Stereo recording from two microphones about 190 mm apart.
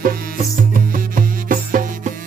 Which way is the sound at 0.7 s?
45° right (ahead or behind).